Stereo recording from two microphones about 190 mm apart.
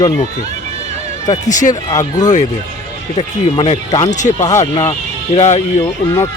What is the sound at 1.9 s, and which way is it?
Speech, 20° left (ahead or behind).